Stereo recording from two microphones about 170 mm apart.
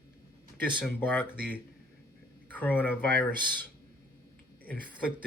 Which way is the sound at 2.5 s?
10° left (ahead or behind).